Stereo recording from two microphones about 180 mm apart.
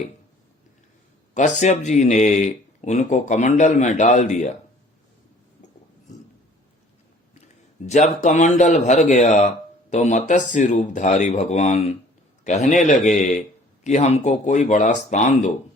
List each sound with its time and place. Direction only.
1.3 s speech: 40° left (ahead or behind)
7.4 s a sound: 40° left (ahead or behind)
8.2 s speech: 40° left (ahead or behind)